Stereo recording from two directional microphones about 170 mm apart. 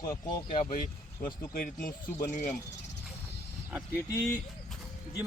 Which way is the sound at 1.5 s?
60° left (ahead or behind).